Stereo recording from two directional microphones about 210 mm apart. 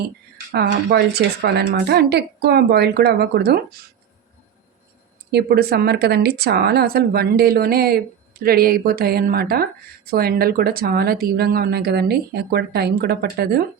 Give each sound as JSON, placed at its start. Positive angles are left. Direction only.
{"t": 0.5, "sound": "speech", "side_deg": -50}
{"t": 5.3, "sound": "speech", "side_deg": -50}